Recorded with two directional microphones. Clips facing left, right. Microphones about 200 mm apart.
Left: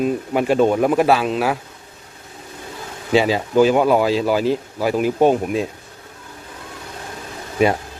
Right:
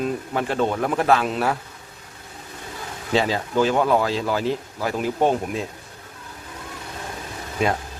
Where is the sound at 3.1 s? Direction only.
15° left (ahead or behind).